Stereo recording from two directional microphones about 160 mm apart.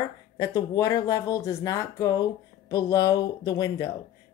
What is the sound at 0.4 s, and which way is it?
Speech, 20° left (ahead or behind).